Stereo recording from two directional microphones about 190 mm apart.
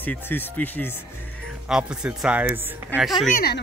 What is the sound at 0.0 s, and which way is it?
Speech, 10° left (ahead or behind).